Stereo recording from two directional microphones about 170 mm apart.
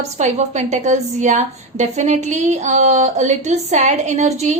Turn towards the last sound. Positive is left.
turn(degrees=-40)  # may be behind; listen again after turning